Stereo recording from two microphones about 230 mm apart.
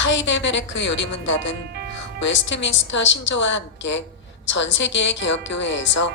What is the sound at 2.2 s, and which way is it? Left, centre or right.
A woman's voice, left.